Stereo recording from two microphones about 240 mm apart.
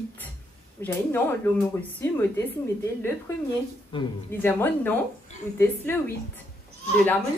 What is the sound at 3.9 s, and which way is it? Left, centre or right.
Speech, left.